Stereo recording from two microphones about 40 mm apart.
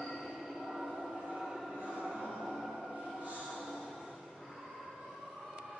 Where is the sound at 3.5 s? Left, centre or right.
Centre.